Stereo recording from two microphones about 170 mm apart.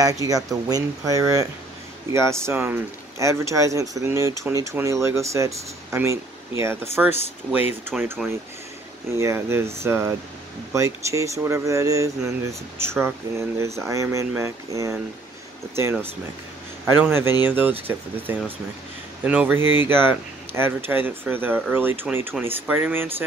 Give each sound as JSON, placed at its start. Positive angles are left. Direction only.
{"t": 0.0, "sound": "speech", "side_deg": -20}
{"t": 9.1, "sound": "speech", "side_deg": -15}